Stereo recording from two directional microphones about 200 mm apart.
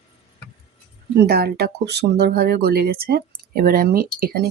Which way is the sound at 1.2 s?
50° right (ahead or behind).